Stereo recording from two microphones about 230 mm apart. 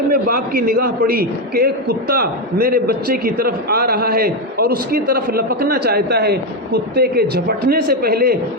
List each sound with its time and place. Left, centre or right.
0.1 s a man's voice: right